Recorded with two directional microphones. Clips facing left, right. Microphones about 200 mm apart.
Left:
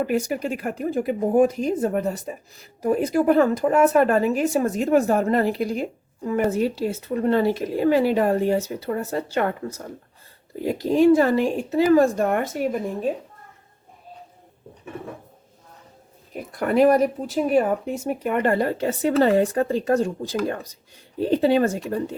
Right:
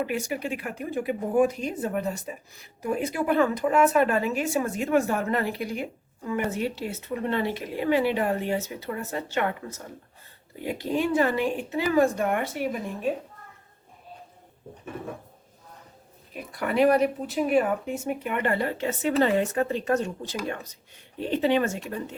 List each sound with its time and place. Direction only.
0.0 s speech: 40° left (ahead or behind)
16.3 s speech: 50° left (ahead or behind)
21.2 s speech: 35° left (ahead or behind)